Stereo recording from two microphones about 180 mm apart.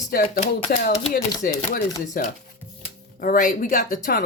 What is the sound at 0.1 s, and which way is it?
Speech, 55° left (ahead or behind).